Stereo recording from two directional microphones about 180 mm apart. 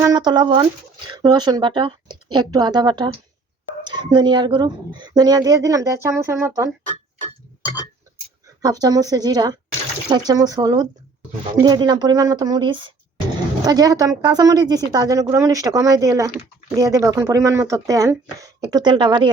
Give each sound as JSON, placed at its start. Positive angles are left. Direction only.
{"t": 0.0, "sound": "speech", "side_deg": -20}
{"t": 8.6, "sound": "speech", "side_deg": -20}